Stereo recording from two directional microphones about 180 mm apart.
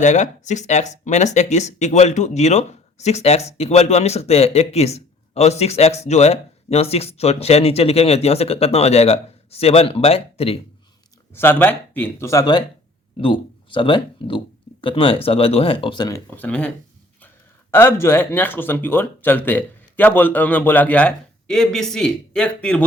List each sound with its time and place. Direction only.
0.0 s speech: 40° left (ahead or behind)
11.3 s speech: 10° left (ahead or behind)